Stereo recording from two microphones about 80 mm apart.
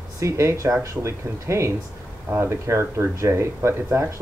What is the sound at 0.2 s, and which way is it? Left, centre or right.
Speech, right.